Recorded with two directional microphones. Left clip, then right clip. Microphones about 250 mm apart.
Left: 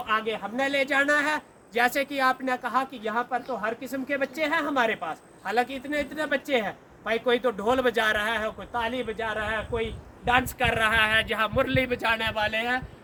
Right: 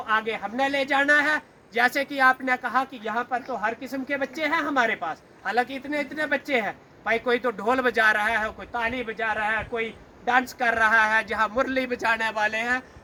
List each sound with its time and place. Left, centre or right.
0.2 s speech: left